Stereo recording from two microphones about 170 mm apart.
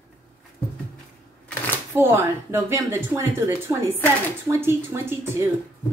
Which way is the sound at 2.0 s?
15° right (ahead or behind).